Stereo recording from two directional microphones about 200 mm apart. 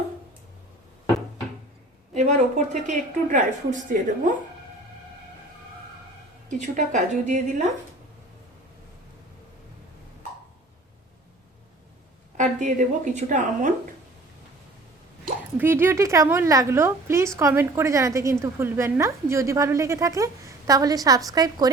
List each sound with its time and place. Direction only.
2.1 s a woman's voice: 35° right (ahead or behind)
6.5 s a woman's voice: 35° right (ahead or behind)
12.4 s a woman's voice: 40° right (ahead or behind)
15.5 s a woman's voice: 10° right (ahead or behind)